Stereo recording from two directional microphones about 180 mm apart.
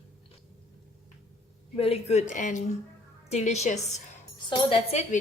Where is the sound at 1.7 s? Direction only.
35° left (ahead or behind).